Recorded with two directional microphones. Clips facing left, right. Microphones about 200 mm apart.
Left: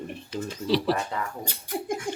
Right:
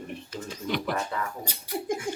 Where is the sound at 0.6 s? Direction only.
30° left (ahead or behind).